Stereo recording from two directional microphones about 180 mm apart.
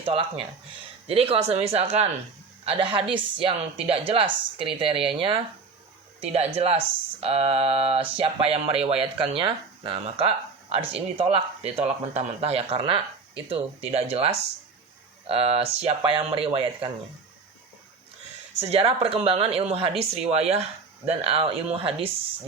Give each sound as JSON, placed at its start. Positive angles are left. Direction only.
{"t": 0.0, "sound": "a woman's voice", "side_deg": -30}
{"t": 18.6, "sound": "speech", "side_deg": -35}